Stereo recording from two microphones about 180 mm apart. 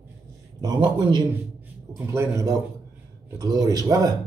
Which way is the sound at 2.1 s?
15° right (ahead or behind).